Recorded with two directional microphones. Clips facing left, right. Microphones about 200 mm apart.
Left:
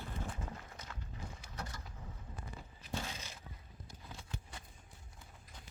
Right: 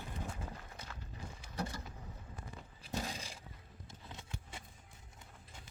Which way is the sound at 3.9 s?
25° right (ahead or behind).